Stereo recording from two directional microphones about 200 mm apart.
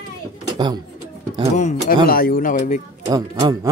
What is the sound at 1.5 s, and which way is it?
Speech, 35° left (ahead or behind).